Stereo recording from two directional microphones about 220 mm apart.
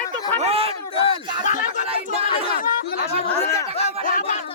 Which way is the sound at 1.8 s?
25° right (ahead or behind).